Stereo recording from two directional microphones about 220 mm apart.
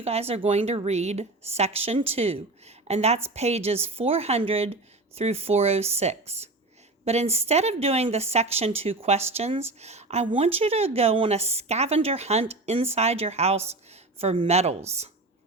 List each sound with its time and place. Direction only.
0.0 s speech: 25° right (ahead or behind)